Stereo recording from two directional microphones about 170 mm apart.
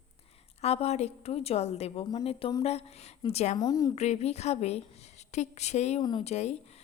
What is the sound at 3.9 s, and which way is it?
A woman's voice, 40° left (ahead or behind).